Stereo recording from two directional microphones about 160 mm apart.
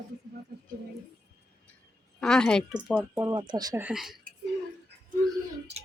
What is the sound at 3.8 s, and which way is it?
Speech, 5° right (ahead or behind).